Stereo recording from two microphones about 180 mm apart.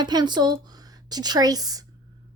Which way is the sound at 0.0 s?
25° right (ahead or behind).